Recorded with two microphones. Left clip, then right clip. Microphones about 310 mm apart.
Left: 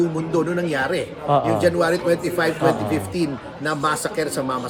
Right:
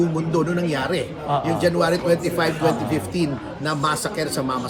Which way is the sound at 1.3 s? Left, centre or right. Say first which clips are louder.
Left 4 dB; left.